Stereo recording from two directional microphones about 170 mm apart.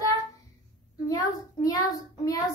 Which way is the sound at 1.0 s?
20° left (ahead or behind).